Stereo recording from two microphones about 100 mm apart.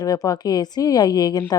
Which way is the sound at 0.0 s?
40° left (ahead or behind).